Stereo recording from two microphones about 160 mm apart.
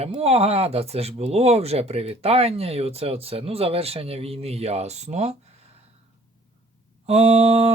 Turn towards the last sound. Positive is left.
turn(degrees=-40)  # may be behind; listen again after turning